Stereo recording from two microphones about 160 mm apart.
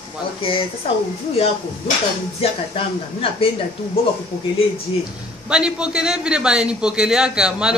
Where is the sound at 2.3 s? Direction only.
35° left (ahead or behind).